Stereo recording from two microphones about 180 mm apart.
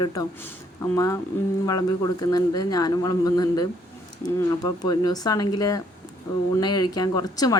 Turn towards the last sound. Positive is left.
turn(degrees=20)  # may be behind; listen again after turning